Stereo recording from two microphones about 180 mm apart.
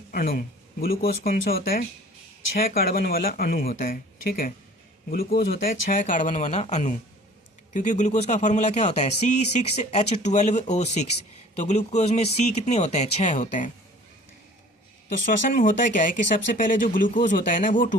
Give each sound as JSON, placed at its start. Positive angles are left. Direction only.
{"t": 0.1, "sound": "speech", "side_deg": 50}
{"t": 15.3, "sound": "speech", "side_deg": 45}